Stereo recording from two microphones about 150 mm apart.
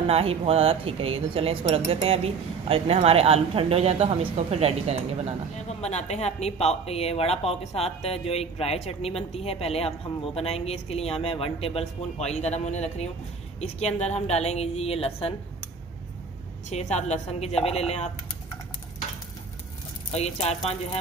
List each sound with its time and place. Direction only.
0.1 s speech: 40° right (ahead or behind)
5.9 s speech: 45° left (ahead or behind)
16.6 s speech: 50° left (ahead or behind)
20.1 s speech: 45° left (ahead or behind)